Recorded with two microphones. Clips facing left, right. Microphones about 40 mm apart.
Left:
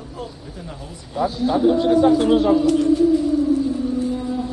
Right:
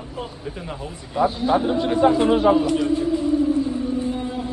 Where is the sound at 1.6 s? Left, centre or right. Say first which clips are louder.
Left 7 dB; right.